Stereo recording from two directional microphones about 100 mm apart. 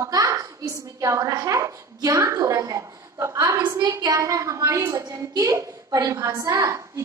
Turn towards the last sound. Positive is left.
turn(degrees=-30)  # may be behind; listen again after turning